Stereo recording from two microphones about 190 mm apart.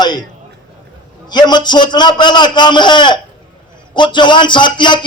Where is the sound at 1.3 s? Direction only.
20° left (ahead or behind).